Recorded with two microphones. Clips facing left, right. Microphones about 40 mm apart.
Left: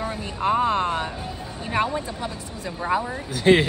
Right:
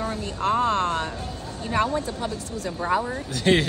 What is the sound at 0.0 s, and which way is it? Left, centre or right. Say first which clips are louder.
Speech: left 1 dB; centre.